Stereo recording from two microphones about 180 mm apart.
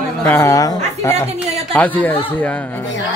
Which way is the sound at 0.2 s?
10° left (ahead or behind).